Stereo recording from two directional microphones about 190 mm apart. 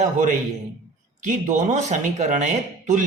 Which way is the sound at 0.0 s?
40° right (ahead or behind).